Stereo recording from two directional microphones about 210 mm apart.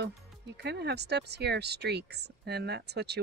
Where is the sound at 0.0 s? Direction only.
55° right (ahead or behind).